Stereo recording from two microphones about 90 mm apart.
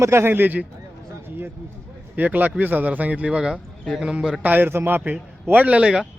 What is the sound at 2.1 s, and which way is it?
Speech, 20° right (ahead or behind).